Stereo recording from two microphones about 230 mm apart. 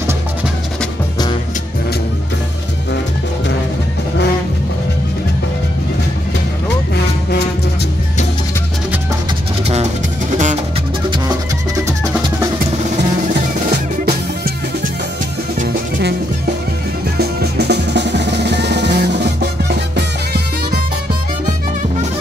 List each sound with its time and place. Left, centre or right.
10.3 s music: right
15.6 s music: right
17.2 s drum: right